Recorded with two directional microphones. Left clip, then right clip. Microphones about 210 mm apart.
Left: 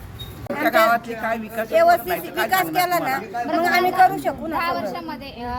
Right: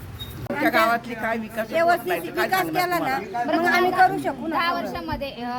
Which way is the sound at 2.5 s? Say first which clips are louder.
Left 4 dB; 20° left (ahead or behind).